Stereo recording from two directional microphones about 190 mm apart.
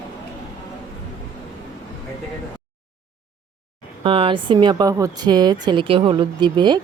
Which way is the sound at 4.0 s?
30° right (ahead or behind).